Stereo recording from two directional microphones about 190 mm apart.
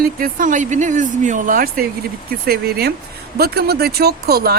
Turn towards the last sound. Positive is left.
turn(degrees=-55)  # may be behind; listen again after turning